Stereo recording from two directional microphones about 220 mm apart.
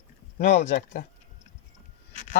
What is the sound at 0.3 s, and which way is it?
Speech, 35° left (ahead or behind).